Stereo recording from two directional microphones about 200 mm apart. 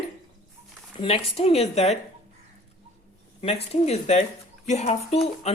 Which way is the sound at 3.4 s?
30° left (ahead or behind).